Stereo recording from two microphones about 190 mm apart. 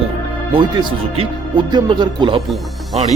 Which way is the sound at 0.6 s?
25° right (ahead or behind).